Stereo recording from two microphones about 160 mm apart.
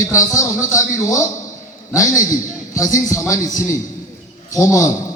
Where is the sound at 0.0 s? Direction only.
20° left (ahead or behind).